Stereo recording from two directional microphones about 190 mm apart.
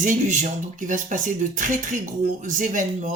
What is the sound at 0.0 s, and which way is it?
A woman's voice, 40° right (ahead or behind).